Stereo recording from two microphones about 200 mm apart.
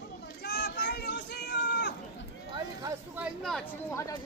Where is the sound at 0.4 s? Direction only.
55° left (ahead or behind).